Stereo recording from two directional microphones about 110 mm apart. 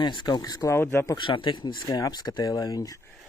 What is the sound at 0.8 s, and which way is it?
Speech, 20° left (ahead or behind).